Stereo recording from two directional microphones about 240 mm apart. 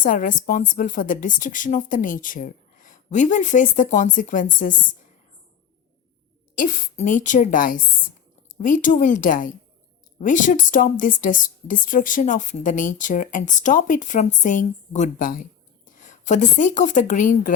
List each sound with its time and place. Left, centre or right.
0.0 s speech: left
6.6 s a woman's voice: left